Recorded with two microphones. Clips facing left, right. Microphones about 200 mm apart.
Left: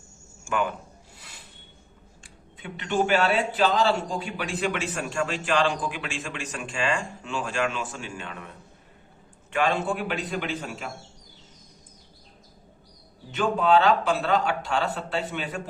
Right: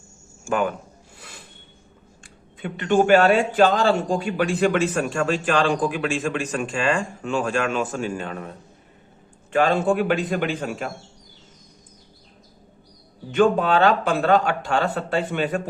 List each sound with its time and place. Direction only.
0.4 s speech: 45° right (ahead or behind)
2.6 s a man's voice: 50° right (ahead or behind)
13.3 s a man's voice: 50° right (ahead or behind)